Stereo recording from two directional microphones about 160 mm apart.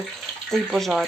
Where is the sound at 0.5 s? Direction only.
Centre (ahead or behind).